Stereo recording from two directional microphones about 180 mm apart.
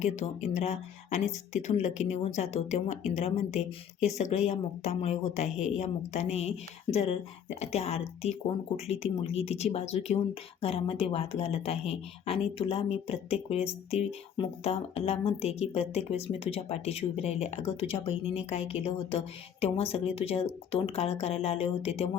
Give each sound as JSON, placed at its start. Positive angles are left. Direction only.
{"t": 0.0, "sound": "speech", "side_deg": 40}